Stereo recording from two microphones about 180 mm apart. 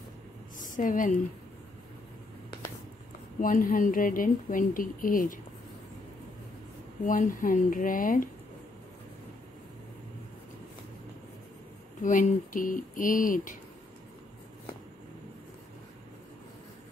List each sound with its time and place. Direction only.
0.6 s speech: 45° left (ahead or behind)
3.3 s speech: 50° left (ahead or behind)
7.1 s speech: 50° left (ahead or behind)
12.0 s speech: 45° left (ahead or behind)